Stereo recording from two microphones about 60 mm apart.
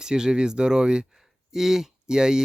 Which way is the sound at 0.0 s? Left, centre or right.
Centre.